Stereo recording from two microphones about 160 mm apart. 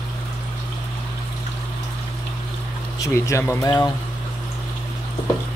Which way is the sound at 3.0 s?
20° left (ahead or behind).